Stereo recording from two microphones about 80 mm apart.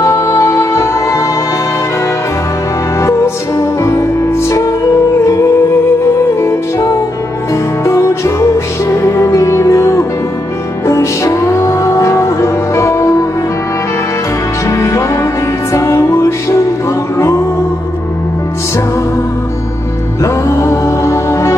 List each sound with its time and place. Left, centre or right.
0.0 s music: left
3.0 s music: left
14.7 s music: left
20.2 s music: left